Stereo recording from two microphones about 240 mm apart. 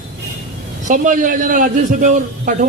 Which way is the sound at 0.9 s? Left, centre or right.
Right.